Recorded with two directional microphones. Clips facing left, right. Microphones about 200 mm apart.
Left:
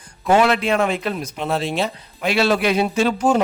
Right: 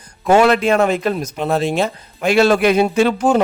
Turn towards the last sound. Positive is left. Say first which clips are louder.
# right 3 dB
turn(degrees=-60)  # may be behind; listen again after turning